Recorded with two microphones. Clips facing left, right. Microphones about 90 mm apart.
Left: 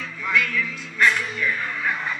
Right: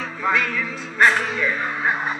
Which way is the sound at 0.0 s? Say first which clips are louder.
Right 3 dB; 40° right (ahead or behind).